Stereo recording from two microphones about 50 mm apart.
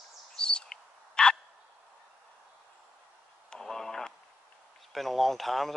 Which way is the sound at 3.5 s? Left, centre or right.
Centre.